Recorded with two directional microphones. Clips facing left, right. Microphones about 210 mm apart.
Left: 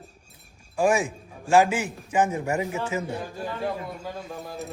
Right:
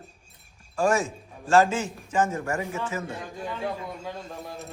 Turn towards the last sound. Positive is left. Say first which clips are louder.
# left 2 dB
turn(degrees=0)  # may be behind; listen again after turning